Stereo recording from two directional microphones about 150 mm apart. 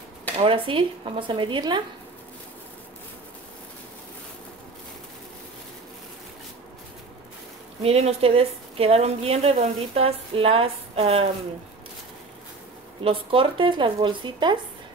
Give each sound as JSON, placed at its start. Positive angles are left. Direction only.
{"t": 0.4, "sound": "a woman's voice", "side_deg": -35}
{"t": 7.8, "sound": "a woman's voice", "side_deg": -45}
{"t": 13.0, "sound": "a woman's voice", "side_deg": -35}